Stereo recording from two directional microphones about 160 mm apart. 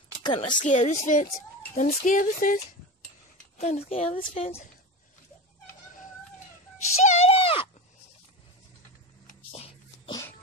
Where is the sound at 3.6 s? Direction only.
40° left (ahead or behind).